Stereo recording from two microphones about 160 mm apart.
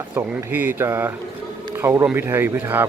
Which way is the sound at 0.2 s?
10° right (ahead or behind).